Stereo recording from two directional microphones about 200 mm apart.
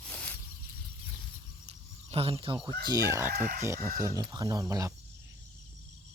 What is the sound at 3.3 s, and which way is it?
Speech, 50° right (ahead or behind).